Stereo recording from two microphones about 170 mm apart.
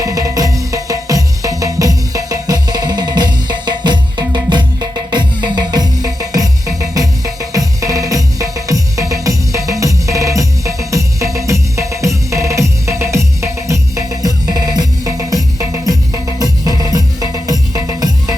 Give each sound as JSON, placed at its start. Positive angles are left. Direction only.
{"t": 0.0, "sound": "music", "side_deg": -20}